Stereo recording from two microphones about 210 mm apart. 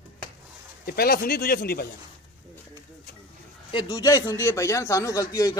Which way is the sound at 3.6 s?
20° left (ahead or behind).